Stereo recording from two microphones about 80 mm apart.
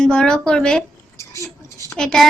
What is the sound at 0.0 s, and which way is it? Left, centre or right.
Speech, centre.